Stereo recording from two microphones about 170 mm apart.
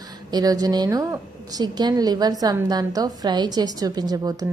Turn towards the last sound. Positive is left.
turn(degrees=-25)  # may be behind; listen again after turning